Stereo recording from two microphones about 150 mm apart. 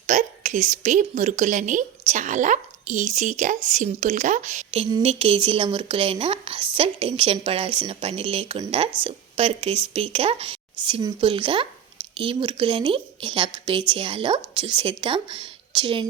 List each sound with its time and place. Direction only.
0.1 s a woman's voice: 55° right (ahead or behind)
5.0 s a woman's voice: 40° right (ahead or behind)